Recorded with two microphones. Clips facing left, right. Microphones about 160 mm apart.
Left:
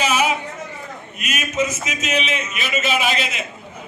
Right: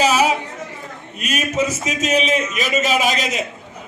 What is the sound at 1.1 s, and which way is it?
A man's voice, 35° right (ahead or behind).